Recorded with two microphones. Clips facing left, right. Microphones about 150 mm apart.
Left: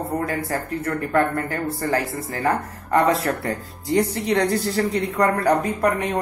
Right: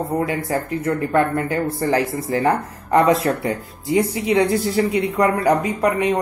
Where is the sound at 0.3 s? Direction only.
20° right (ahead or behind).